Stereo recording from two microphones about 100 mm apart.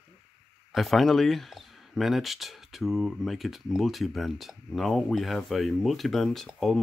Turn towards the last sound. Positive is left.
turn(degrees=5)  # may be behind; listen again after turning